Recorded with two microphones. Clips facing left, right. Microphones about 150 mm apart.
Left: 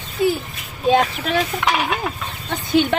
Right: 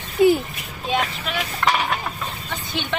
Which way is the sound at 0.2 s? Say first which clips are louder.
Right 4 dB; 20° right (ahead or behind).